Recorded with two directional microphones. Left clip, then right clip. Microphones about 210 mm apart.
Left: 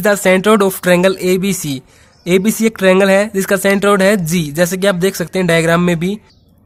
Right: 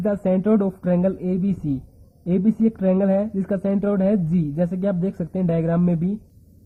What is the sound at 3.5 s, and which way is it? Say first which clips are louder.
Speech: left 11 dB; 30° left (ahead or behind).